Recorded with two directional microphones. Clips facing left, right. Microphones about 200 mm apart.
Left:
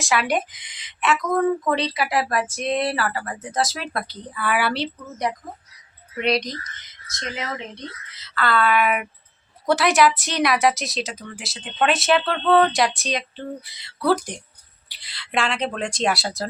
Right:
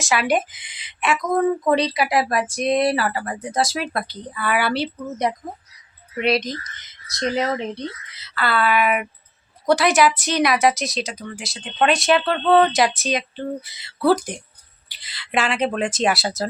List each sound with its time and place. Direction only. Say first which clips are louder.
0.0 s speech: right 2 dB; centre (ahead or behind)
5.3 s speech: even; 25° right (ahead or behind)
6.1 s speech: right 2 dB; 5° right (ahead or behind)
7.1 s speech: right 9 dB; 35° right (ahead or behind)
8.1 s speech: left 2 dB; 10° right (ahead or behind)